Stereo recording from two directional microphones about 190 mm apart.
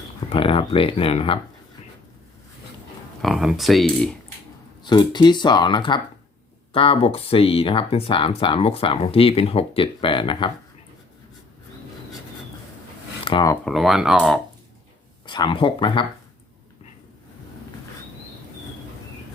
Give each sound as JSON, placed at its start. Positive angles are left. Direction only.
{"t": 0.3, "sound": "speech", "side_deg": 30}
{"t": 3.2, "sound": "speech", "side_deg": 0}
{"t": 4.8, "sound": "speech", "side_deg": 25}
{"t": 13.2, "sound": "speech", "side_deg": 20}
{"t": 13.7, "sound": "speech", "side_deg": 0}
{"t": 15.3, "sound": "speech", "side_deg": 25}